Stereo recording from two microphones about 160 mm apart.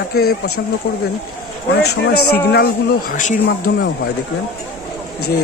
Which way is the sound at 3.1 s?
55° left (ahead or behind).